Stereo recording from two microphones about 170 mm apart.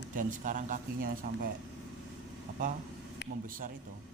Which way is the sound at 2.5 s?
55° right (ahead or behind).